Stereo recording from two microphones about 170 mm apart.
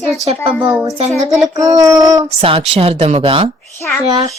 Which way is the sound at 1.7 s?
20° right (ahead or behind).